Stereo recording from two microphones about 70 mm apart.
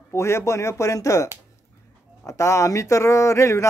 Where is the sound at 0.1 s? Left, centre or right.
Left.